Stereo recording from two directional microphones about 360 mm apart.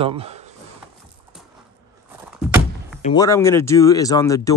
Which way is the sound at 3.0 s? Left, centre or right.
Centre.